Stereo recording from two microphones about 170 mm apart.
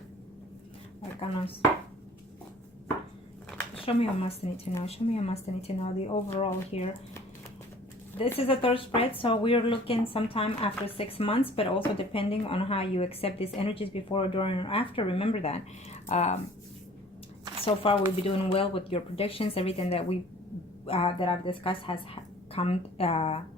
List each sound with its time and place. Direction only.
3.8 s speech: 35° left (ahead or behind)
8.4 s speech: 35° left (ahead or behind)
17.7 s speech: 30° left (ahead or behind)